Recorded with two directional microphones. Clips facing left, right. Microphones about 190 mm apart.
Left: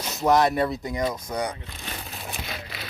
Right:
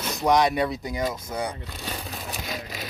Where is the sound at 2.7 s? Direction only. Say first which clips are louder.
Right 3 dB; 45° right (ahead or behind).